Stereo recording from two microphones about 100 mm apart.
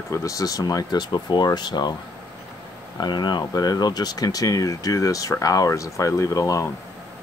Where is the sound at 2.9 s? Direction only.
45° left (ahead or behind).